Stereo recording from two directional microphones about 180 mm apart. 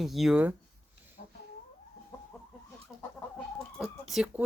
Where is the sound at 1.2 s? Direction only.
50° left (ahead or behind).